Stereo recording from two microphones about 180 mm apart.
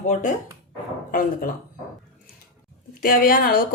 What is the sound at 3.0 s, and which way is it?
Speech, 50° left (ahead or behind).